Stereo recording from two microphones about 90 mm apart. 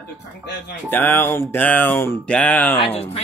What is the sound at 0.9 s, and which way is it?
Speech, 20° left (ahead or behind).